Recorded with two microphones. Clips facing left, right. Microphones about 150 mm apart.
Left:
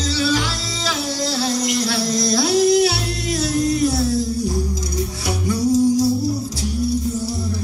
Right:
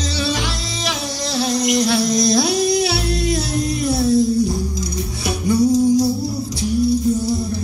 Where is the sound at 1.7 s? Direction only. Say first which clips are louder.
Right 4 dB; 20° right (ahead or behind).